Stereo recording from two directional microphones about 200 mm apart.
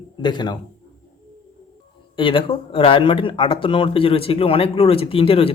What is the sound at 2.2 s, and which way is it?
Speech, 25° left (ahead or behind).